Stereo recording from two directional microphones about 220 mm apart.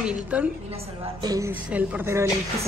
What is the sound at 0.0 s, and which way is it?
A woman's voice, 5° right (ahead or behind).